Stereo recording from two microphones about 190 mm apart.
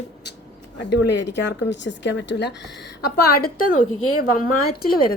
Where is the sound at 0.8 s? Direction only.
65° left (ahead or behind).